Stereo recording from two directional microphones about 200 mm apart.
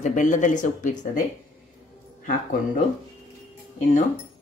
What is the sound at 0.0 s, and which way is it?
Speech, 40° left (ahead or behind).